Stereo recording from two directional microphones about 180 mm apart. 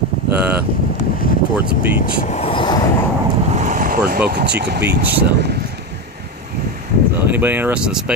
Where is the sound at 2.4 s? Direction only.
30° left (ahead or behind).